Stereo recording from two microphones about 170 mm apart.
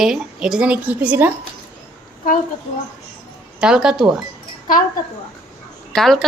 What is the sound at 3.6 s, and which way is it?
Speech, 5° right (ahead or behind).